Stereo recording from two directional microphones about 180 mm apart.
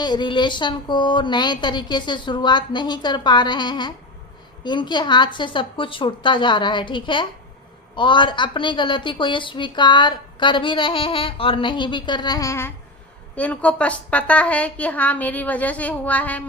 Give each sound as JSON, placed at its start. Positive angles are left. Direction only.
{"t": 0.0, "sound": "a woman's voice", "side_deg": 25}